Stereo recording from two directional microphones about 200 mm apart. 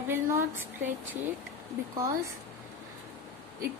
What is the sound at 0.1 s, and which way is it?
Speech, 15° right (ahead or behind).